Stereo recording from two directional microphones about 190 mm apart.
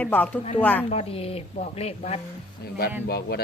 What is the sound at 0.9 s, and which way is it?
A woman's voice, 30° left (ahead or behind).